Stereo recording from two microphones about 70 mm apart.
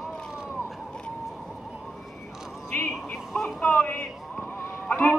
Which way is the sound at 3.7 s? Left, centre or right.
Left.